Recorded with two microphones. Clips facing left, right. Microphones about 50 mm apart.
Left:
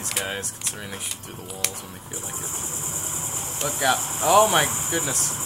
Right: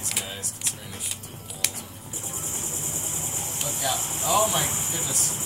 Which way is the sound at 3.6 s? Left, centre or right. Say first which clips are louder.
Left 8 dB; left.